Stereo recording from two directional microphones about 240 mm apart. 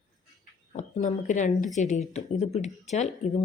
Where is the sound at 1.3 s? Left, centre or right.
Left.